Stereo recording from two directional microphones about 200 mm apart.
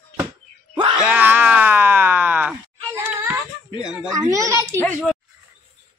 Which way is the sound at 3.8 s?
5° right (ahead or behind).